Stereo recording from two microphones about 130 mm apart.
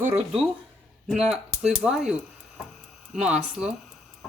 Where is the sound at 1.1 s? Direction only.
5° right (ahead or behind).